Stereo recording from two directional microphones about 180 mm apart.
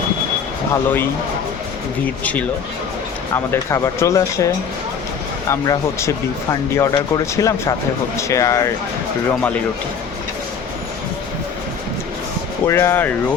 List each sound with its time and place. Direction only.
0.7 s speech: 10° left (ahead or behind)
2.2 s speech: 5° left (ahead or behind)
12.6 s speech: 15° left (ahead or behind)